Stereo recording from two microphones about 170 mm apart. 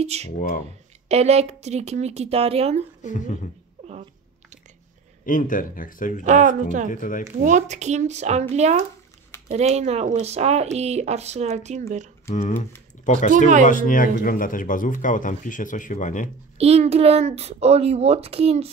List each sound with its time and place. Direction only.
0.0 s speech: 40° right (ahead or behind)
0.4 s speech: 50° left (ahead or behind)
1.0 s speech: 40° right (ahead or behind)
3.1 s speech: 45° left (ahead or behind)
5.2 s speech: 50° left (ahead or behind)
6.2 s speech: 45° right (ahead or behind)
6.9 s speech: 50° left (ahead or behind)
7.4 s speech: 45° right (ahead or behind)
12.4 s speech: 50° left (ahead or behind)
16.5 s speech: 35° right (ahead or behind)